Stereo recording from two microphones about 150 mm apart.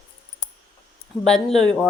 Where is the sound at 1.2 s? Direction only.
5° left (ahead or behind).